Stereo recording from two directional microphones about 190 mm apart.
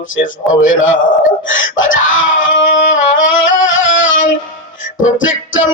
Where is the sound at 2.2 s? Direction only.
90° left.